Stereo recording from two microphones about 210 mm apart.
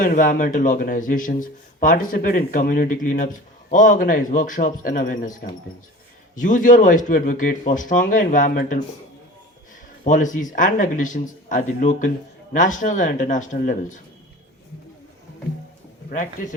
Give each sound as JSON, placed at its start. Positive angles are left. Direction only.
{"t": 0.0, "sound": "speech", "side_deg": 40}
{"t": 10.0, "sound": "speech", "side_deg": 40}
{"t": 16.0, "sound": "speech", "side_deg": 40}